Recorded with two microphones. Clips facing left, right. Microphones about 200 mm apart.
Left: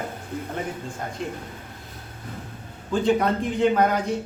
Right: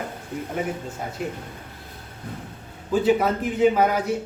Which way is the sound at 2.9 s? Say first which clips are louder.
Right 1 dB; 5° right (ahead or behind).